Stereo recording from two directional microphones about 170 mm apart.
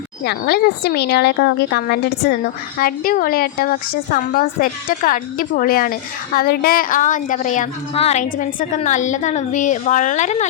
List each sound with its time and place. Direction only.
0.3 s a woman's voice: 75° left (ahead or behind)
2.7 s a woman's voice: 60° left (ahead or behind)